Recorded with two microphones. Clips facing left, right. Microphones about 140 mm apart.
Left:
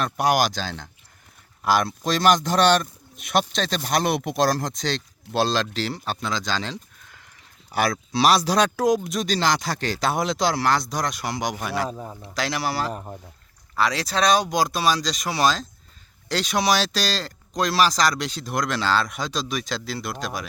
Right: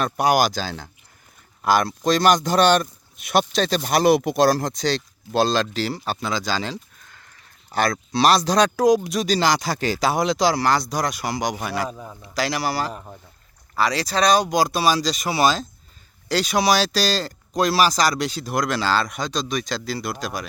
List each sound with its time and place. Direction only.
0.0 s speech: centre (ahead or behind)
7.7 s speech: 5° left (ahead or behind)
11.9 s a man's voice: 20° left (ahead or behind)
12.2 s speech: centre (ahead or behind)